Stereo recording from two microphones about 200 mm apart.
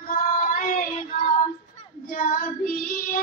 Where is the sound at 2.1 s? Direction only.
45° left (ahead or behind).